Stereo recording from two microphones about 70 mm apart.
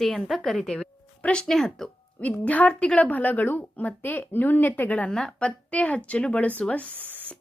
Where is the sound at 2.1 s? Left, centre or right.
Left.